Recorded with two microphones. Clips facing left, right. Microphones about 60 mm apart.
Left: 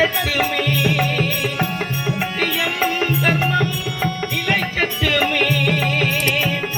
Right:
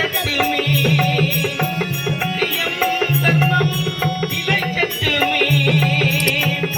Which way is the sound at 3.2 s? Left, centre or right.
Centre.